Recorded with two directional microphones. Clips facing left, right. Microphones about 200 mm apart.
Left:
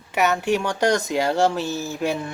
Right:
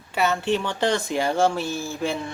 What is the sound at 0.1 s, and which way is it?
Speech, 15° left (ahead or behind).